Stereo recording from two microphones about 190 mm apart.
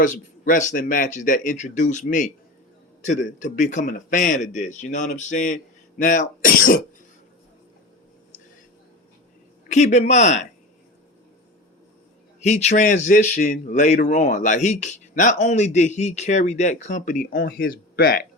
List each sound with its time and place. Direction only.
0.0 s speech: 45° left (ahead or behind)
9.6 s speech: 40° left (ahead or behind)
12.4 s speech: 35° left (ahead or behind); by 18.2 s 50° left (ahead or behind)